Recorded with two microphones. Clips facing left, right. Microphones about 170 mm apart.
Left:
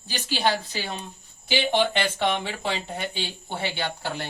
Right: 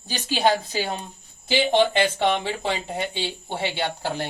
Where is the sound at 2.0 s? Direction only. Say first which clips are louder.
Right 4 dB; 20° right (ahead or behind).